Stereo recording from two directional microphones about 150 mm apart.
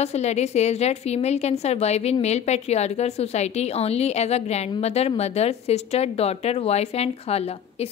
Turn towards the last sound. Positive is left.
turn(degrees=40)  # may be behind; listen again after turning